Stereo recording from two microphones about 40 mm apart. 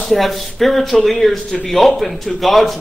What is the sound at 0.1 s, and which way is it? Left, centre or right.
A man's voice, centre.